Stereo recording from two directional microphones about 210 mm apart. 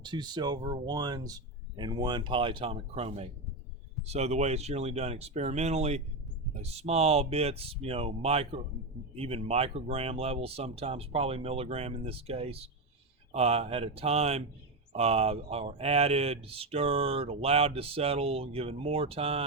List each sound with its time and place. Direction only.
0.0 s speech: 20° right (ahead or behind)